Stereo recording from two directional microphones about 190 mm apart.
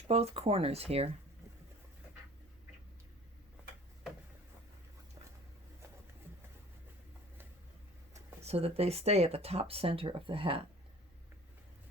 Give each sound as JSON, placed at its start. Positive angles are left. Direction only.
{"t": 0.1, "sound": "speech", "side_deg": -30}
{"t": 8.1, "sound": "speech", "side_deg": -35}